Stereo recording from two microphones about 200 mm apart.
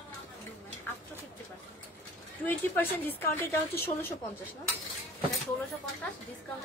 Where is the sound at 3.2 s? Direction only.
10° left (ahead or behind).